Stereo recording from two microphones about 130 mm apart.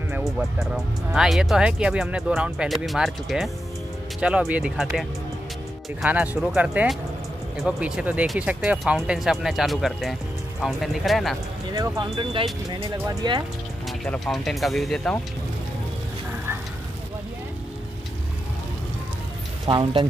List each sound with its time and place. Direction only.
0.2 s speech: centre (ahead or behind)
6.0 s speech: 15° right (ahead or behind)
11.7 s speech: 25° right (ahead or behind)
12.2 s speech: 40° right (ahead or behind)
13.0 s speech: 25° right (ahead or behind)
13.8 s speech: 5° left (ahead or behind)
19.6 s speech: 40° right (ahead or behind)